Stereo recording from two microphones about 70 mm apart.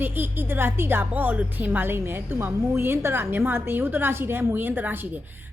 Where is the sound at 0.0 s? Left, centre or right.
Right.